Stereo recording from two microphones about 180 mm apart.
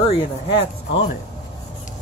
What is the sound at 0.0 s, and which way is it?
Speech, 30° left (ahead or behind).